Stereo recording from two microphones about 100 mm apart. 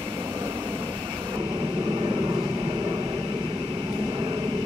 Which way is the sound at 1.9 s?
40° right (ahead or behind).